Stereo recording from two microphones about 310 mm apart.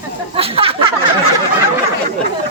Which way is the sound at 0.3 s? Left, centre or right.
Centre.